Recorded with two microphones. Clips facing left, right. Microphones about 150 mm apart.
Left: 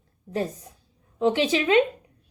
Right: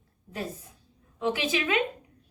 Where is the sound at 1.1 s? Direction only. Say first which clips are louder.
Left 6 dB; 30° left (ahead or behind).